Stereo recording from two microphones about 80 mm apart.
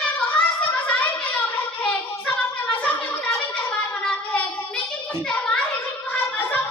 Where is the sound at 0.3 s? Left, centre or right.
Centre.